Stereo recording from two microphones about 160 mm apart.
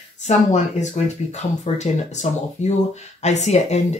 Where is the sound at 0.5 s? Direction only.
45° left (ahead or behind).